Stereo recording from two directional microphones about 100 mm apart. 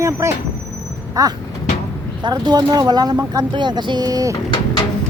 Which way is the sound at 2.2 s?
45° right (ahead or behind).